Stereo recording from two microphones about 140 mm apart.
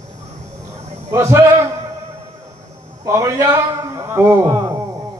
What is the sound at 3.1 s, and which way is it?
Speech, 25° right (ahead or behind).